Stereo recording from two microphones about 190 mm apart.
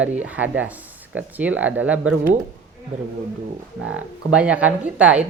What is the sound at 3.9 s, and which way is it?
Speech, 5° right (ahead or behind).